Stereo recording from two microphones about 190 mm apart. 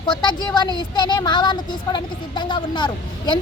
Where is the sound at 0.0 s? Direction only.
25° left (ahead or behind).